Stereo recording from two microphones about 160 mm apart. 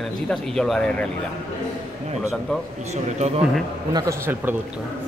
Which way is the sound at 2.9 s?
45° right (ahead or behind).